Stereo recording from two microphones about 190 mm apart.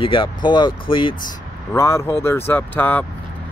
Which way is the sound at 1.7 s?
15° left (ahead or behind).